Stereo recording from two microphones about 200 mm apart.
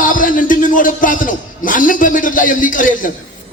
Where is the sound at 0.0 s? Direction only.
40° left (ahead or behind).